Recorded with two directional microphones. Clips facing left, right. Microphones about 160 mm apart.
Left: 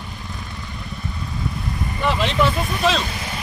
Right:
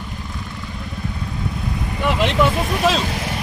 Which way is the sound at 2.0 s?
10° right (ahead or behind).